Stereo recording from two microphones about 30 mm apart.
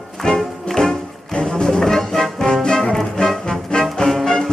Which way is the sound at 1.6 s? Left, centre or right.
Centre.